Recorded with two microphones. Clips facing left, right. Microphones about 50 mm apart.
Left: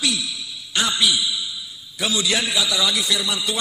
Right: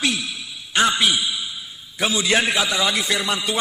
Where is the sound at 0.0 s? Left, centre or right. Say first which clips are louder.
Right 1 dB; right.